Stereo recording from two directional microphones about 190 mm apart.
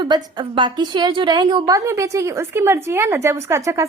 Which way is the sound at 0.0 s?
20° right (ahead or behind).